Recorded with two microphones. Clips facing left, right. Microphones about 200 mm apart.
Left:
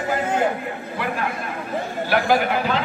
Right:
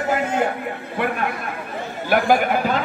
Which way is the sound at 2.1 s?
50° right (ahead or behind).